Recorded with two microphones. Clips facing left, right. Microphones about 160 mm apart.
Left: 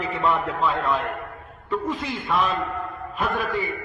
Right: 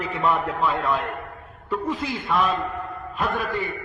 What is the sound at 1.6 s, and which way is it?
A man's voice, 5° right (ahead or behind).